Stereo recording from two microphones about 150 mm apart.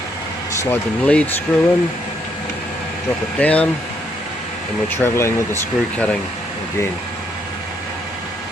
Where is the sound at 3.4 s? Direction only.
10° left (ahead or behind).